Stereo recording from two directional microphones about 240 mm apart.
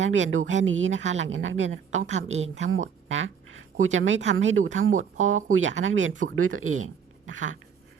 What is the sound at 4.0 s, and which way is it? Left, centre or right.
A woman's voice, right.